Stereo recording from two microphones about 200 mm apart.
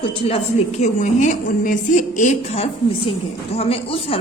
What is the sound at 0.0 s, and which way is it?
Speech, 25° left (ahead or behind).